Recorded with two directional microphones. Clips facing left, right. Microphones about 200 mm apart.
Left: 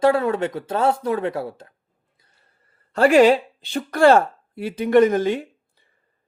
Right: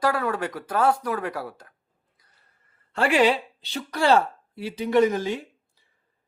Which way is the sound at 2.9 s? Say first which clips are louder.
Left 7 dB; 40° left (ahead or behind).